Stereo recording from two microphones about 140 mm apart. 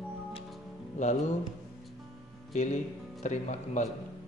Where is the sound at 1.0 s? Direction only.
55° left (ahead or behind).